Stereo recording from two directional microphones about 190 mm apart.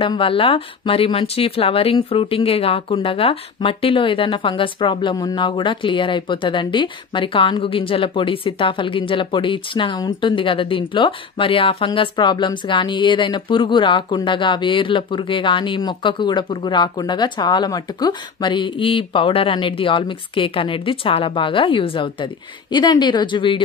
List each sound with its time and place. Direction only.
0.0 s speech: 30° left (ahead or behind)